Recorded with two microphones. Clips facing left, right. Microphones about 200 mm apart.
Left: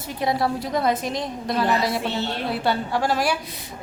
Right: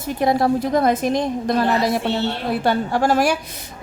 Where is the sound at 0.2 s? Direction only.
45° right (ahead or behind).